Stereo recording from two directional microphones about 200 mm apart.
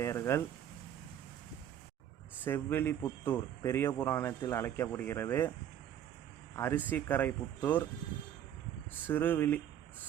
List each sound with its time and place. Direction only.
0.0 s speech: 15° left (ahead or behind)
2.4 s speech: 10° left (ahead or behind)
6.6 s speech: 10° left (ahead or behind)
9.0 s speech: 10° left (ahead or behind)